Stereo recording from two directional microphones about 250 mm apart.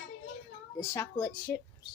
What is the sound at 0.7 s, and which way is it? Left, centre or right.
Speech, centre.